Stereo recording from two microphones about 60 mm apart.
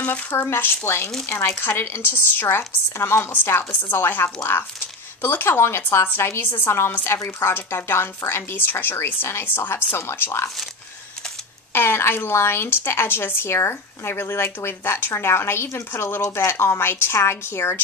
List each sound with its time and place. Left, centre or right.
0.0 s speech: left
0.4 s a woman's voice: left
7.1 s speech: left
11.7 s a woman's voice: left